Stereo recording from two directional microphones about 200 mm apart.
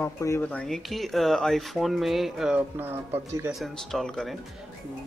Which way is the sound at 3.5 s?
Centre (ahead or behind).